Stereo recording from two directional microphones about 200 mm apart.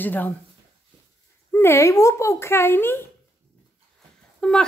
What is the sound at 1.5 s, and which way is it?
Speech, 10° left (ahead or behind).